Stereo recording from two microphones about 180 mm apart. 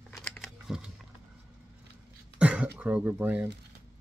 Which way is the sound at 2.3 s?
5° right (ahead or behind).